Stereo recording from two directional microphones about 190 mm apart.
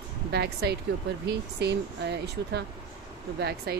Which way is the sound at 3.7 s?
55° right (ahead or behind).